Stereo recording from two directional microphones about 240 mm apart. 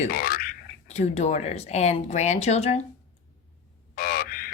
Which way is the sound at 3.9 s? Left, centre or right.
Left.